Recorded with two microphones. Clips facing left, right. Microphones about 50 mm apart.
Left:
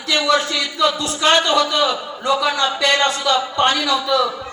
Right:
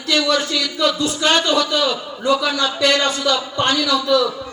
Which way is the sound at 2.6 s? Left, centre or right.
Left.